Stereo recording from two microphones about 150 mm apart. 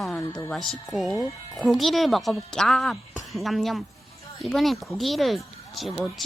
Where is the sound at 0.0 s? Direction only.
5° left (ahead or behind).